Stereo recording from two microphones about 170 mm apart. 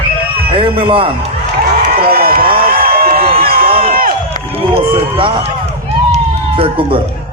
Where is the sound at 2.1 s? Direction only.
60° right (ahead or behind).